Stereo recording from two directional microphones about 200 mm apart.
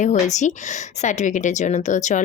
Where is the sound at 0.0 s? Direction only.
35° left (ahead or behind).